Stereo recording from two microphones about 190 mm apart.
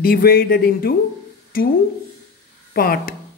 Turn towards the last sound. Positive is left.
turn(degrees=50)  # may be behind; listen again after turning